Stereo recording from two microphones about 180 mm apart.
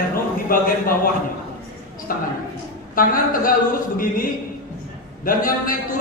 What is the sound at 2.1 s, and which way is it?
A man's voice, 50° left (ahead or behind).